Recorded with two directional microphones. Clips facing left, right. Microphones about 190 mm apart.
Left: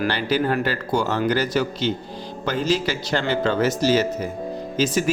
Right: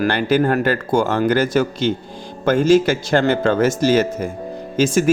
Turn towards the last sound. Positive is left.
turn(degrees=-50)  # may be behind; listen again after turning